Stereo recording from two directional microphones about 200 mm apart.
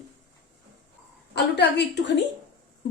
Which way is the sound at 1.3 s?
60° left (ahead or behind).